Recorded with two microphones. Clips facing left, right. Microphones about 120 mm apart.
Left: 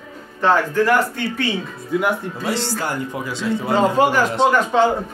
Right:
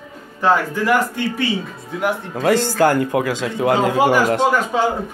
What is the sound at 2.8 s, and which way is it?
Speech, 70° right (ahead or behind).